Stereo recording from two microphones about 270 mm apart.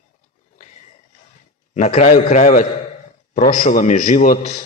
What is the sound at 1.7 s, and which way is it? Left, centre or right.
A man's voice, left.